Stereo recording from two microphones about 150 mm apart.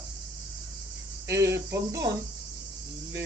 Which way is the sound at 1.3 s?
20° right (ahead or behind).